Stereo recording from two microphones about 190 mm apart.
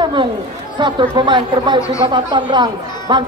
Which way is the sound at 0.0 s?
25° right (ahead or behind).